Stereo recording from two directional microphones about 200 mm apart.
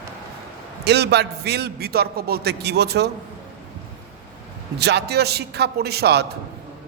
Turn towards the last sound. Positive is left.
turn(degrees=-55)  # may be behind; listen again after turning